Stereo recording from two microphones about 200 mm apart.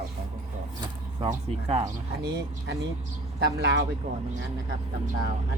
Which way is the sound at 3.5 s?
60° right (ahead or behind).